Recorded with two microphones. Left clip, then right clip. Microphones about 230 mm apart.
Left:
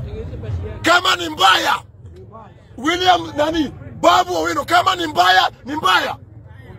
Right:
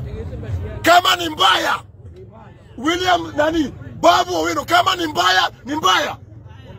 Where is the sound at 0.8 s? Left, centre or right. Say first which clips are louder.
Right 2 dB; centre.